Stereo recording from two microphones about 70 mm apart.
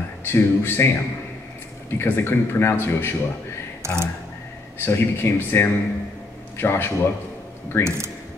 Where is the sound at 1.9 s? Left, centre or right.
Left.